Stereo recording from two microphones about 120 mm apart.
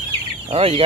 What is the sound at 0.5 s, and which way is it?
Speech, 55° right (ahead or behind).